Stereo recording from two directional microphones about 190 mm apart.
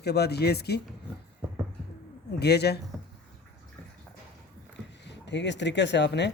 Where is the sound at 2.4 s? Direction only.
60° left (ahead or behind).